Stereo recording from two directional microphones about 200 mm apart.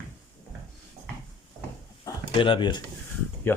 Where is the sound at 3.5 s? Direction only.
10° left (ahead or behind).